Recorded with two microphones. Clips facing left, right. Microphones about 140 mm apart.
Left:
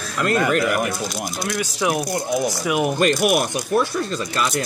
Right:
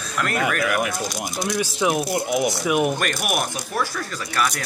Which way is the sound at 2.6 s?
Centre (ahead or behind).